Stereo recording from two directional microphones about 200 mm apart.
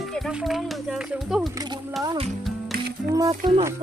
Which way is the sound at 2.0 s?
20° right (ahead or behind).